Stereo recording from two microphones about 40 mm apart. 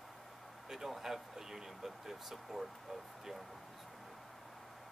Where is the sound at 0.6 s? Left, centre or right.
Centre.